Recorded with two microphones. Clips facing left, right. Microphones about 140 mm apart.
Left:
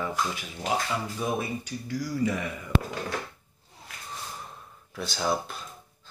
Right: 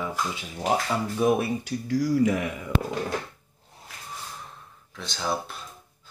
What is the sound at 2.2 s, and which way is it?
Speech, 75° right (ahead or behind).